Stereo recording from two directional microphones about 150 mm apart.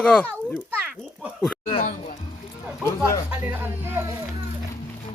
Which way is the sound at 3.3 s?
10° right (ahead or behind).